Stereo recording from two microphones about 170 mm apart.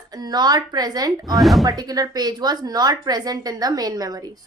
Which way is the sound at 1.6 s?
20° right (ahead or behind).